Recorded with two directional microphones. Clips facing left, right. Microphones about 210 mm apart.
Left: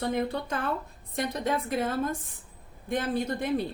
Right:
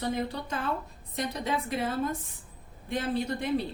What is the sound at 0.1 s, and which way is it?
A woman's voice, 55° left (ahead or behind).